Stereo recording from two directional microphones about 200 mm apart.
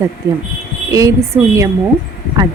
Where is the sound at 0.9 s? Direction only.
15° right (ahead or behind).